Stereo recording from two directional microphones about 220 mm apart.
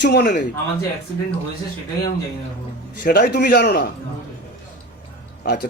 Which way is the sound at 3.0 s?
45° left (ahead or behind).